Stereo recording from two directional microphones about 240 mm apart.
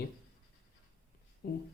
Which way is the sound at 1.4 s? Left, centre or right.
Left.